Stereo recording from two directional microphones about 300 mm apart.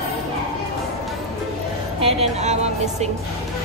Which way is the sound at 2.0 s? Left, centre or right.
Right.